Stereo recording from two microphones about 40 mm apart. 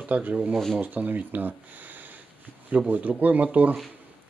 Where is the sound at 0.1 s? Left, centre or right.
Right.